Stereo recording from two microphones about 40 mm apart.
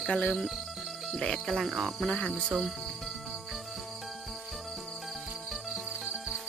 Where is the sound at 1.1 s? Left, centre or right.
Centre.